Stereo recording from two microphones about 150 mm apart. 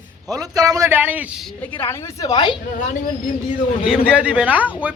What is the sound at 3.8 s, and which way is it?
A man's voice, 5° right (ahead or behind).